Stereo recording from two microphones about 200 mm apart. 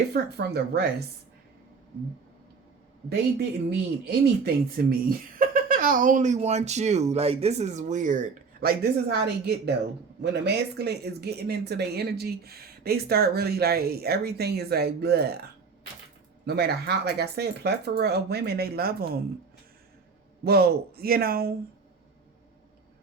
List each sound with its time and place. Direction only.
0.1 s speech: 55° right (ahead or behind)
3.7 s speech: 55° right (ahead or behind)
16.5 s speech: 55° right (ahead or behind)
20.4 s speech: 50° right (ahead or behind)